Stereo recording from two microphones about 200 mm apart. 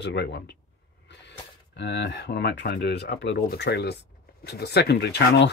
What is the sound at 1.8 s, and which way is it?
Speech, 60° left (ahead or behind).